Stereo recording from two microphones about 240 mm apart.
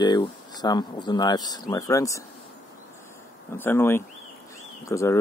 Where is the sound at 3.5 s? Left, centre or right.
Centre.